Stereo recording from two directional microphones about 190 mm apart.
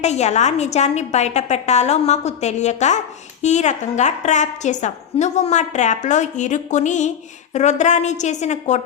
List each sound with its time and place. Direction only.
0.0 s a woman's voice: 35° left (ahead or behind)